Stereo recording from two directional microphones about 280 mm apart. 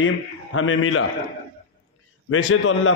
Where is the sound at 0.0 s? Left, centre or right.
Left.